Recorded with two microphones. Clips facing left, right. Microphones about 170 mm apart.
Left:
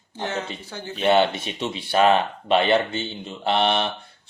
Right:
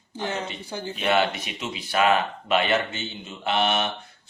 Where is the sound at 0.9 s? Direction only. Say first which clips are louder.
Left 4 dB; 30° left (ahead or behind).